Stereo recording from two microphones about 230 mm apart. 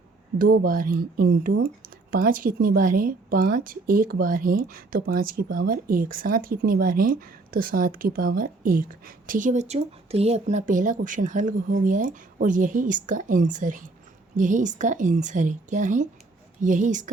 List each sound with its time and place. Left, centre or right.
0.3 s a woman's voice: right